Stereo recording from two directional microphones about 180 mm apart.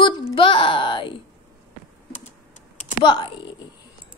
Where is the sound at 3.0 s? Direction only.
25° left (ahead or behind).